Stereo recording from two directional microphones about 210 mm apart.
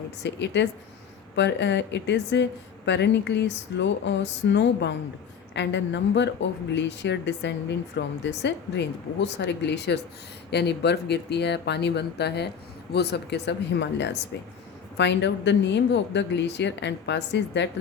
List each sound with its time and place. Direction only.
0.2 s speech: 55° left (ahead or behind)